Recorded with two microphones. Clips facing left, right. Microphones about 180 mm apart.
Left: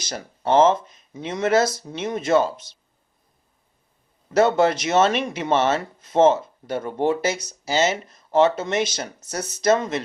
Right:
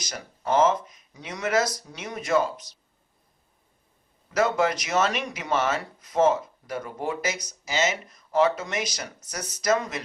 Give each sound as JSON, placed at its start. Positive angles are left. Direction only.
{"t": 0.0, "sound": "speech", "side_deg": 30}
{"t": 4.4, "sound": "speech", "side_deg": 30}